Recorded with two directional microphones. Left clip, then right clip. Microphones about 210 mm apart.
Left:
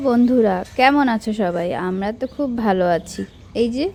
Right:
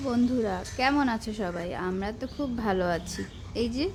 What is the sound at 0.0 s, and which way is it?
A woman's voice, 35° left (ahead or behind).